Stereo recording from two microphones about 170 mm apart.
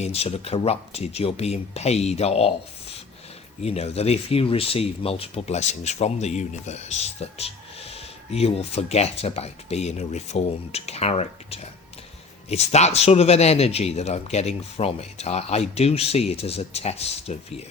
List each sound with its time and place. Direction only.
0.0 s speech: 35° left (ahead or behind)
3.6 s speech: 40° left (ahead or behind)